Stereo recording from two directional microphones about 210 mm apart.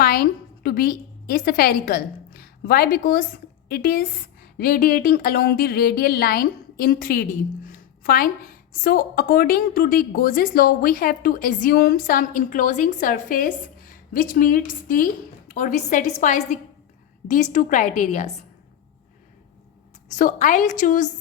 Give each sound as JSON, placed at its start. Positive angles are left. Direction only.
{"t": 0.0, "sound": "a woman's voice", "side_deg": 45}
{"t": 20.1, "sound": "a woman's voice", "side_deg": 35}